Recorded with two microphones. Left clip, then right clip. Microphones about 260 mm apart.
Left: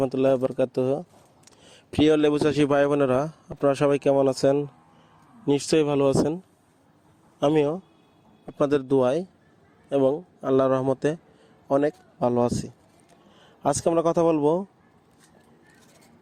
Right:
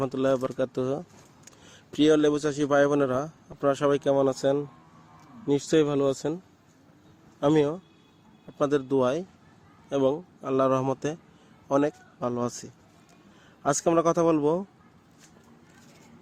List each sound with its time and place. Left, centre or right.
0.0 s a man's voice: centre